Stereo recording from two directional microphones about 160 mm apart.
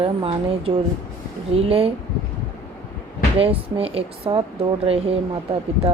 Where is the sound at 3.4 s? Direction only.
35° right (ahead or behind).